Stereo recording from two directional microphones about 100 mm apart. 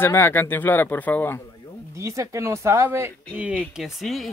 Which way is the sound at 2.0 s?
30° right (ahead or behind).